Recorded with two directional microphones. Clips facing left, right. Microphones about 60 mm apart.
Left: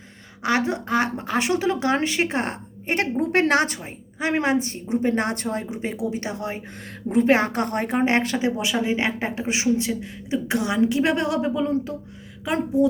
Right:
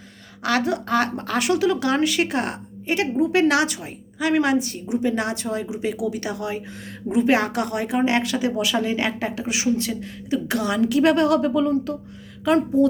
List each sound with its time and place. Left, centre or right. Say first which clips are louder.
0.4 s a woman's voice: right 1 dB; left